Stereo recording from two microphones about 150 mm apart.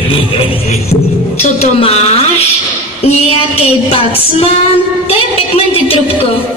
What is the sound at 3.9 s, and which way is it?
Music, 40° left (ahead or behind).